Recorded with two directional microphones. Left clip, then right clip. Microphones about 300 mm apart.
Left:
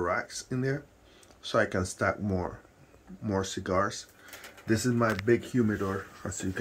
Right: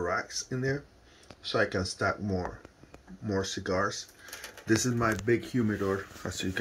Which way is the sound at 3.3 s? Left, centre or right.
Centre.